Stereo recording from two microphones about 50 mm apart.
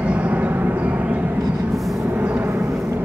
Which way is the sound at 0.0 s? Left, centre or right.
Right.